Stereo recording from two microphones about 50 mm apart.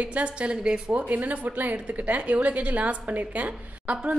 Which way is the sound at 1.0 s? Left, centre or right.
Right.